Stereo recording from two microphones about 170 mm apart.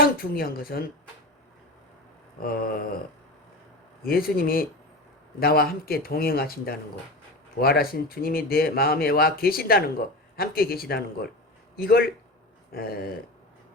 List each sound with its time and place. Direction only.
0.0 s speech: 60° left (ahead or behind)
2.4 s speech: 60° left (ahead or behind)
4.0 s speech: 60° left (ahead or behind)